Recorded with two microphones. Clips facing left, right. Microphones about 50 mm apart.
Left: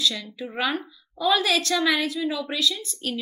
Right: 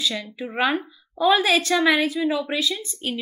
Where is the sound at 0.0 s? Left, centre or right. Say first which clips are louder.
Even; centre.